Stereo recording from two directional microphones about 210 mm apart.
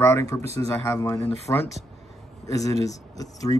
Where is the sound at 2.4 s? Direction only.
15° left (ahead or behind).